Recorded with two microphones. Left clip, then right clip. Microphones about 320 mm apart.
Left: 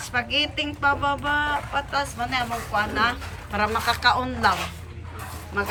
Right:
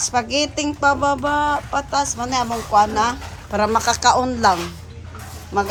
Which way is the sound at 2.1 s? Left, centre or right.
Centre.